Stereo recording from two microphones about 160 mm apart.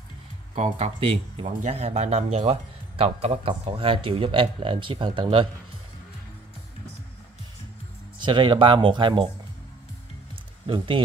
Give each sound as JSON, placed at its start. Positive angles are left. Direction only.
{"t": 0.6, "sound": "speech", "side_deg": -45}
{"t": 0.9, "sound": "speech", "side_deg": -30}
{"t": 1.4, "sound": "speech", "side_deg": -45}
{"t": 8.2, "sound": "speech", "side_deg": -30}